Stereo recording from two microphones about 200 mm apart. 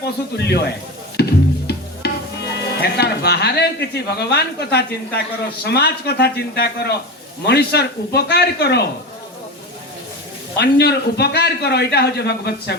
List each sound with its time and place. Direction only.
0.3 s a man's voice: 55° left (ahead or behind)
1.1 s music: 55° left (ahead or behind)
5.7 s a man's voice: 55° left (ahead or behind)
10.6 s a man's voice: 55° left (ahead or behind)